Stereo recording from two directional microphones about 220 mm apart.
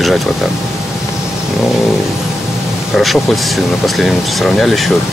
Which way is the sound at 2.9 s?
Centre (ahead or behind).